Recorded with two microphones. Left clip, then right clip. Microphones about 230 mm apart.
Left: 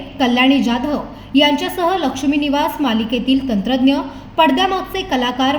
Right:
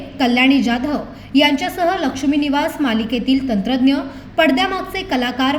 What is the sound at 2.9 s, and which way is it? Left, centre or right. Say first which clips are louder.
Speech: left 1 dB; left.